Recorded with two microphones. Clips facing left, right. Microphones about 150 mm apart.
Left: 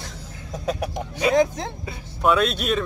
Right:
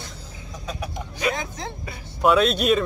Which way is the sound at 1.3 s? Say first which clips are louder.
Left 12 dB; 45° left (ahead or behind).